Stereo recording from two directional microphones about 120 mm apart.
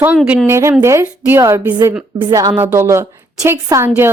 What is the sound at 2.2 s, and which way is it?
Speech, 35° right (ahead or behind).